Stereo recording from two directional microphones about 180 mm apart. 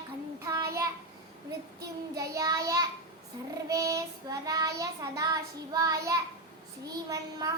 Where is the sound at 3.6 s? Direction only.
20° right (ahead or behind).